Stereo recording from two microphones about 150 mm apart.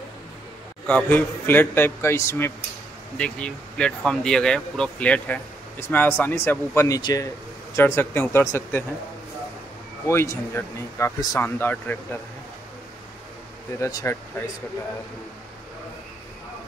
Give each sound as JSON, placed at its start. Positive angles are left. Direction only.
{"t": 0.8, "sound": "speech", "side_deg": 10}
{"t": 7.0, "sound": "speech", "side_deg": 25}
{"t": 7.7, "sound": "speech", "side_deg": 15}
{"t": 10.0, "sound": "speech", "side_deg": 15}
{"t": 13.7, "sound": "speech", "side_deg": 20}